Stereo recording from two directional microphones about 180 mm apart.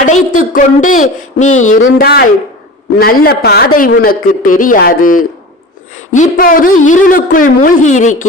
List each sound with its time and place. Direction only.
0.0 s a man's voice: 45° left (ahead or behind)
2.0 s a man's voice: 60° left (ahead or behind)